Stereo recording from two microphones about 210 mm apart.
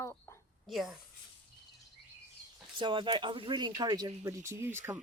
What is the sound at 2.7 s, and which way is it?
Speech, 20° right (ahead or behind).